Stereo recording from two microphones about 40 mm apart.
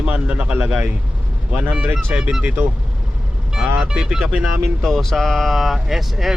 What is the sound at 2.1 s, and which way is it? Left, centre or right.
Speech, centre.